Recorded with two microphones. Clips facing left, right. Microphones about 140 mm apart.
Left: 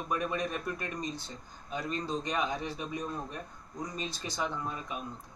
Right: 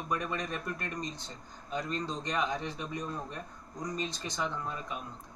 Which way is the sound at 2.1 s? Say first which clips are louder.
Left 2 dB; 5° left (ahead or behind).